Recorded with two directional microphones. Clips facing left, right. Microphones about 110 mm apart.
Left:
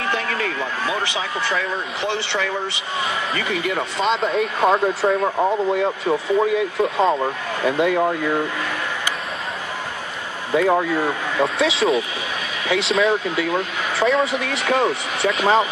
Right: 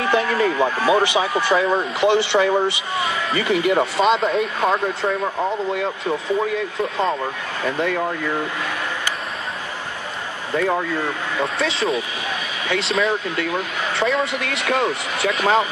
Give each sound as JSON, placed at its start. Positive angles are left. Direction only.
{"t": 0.0, "sound": "speech", "side_deg": -15}
{"t": 1.5, "sound": "speech", "side_deg": -30}
{"t": 2.0, "sound": "speech", "side_deg": -15}
{"t": 4.0, "sound": "speech", "side_deg": 0}
{"t": 10.5, "sound": "speech", "side_deg": 10}